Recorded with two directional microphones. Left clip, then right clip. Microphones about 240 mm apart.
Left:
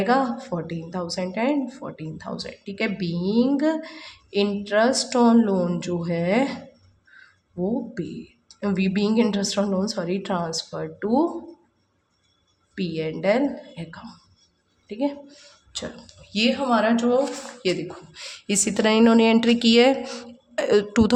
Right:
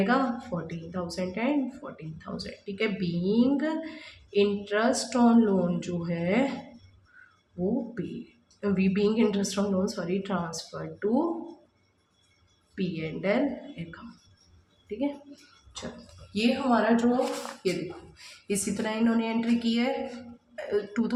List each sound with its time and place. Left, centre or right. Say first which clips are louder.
0.0 s speech: left 5 dB; left
8.6 s speech: left 2 dB; left
12.7 s a woman's voice: left 6 dB; left
16.3 s speech: left 4 dB; left